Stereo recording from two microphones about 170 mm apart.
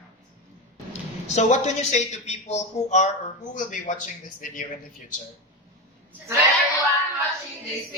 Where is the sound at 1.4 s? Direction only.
45° left (ahead or behind).